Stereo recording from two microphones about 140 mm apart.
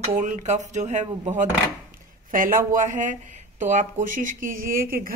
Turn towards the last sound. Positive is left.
turn(degrees=-90)